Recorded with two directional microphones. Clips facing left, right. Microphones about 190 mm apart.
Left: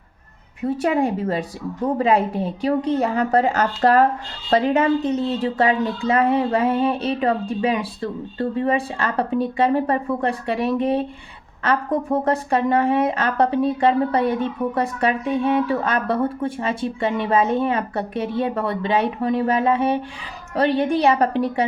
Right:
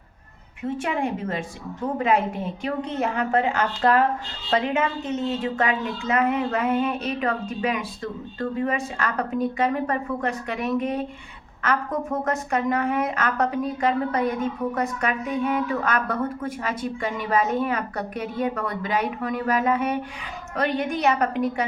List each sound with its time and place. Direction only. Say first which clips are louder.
0.6 s speech: left 6 dB; 40° left (ahead or behind)